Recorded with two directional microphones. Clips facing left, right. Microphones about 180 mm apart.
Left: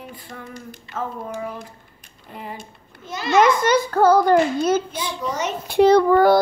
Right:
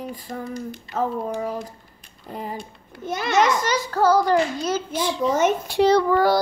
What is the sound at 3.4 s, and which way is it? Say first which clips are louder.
A child's voice: left 5 dB; 55° left (ahead or behind).